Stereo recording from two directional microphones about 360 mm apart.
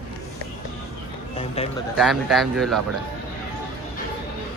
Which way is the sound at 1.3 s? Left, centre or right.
Centre.